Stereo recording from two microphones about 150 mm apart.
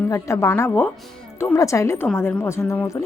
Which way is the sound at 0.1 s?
20° left (ahead or behind).